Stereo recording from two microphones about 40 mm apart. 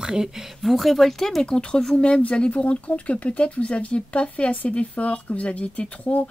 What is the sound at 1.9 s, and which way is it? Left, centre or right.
Speech, left.